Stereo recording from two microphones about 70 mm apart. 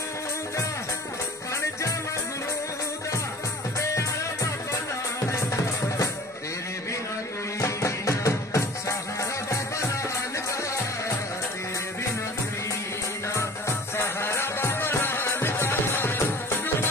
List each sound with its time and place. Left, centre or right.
5.3 s music: left
7.6 s music: left
13.3 s music: left